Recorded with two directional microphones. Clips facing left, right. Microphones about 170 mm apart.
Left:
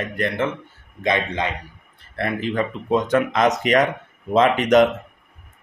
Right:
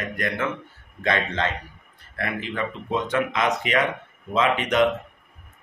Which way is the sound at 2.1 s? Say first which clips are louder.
Left 5 dB; 35° left (ahead or behind).